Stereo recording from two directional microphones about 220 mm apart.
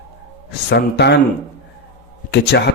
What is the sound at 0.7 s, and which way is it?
Speech, 50° left (ahead or behind).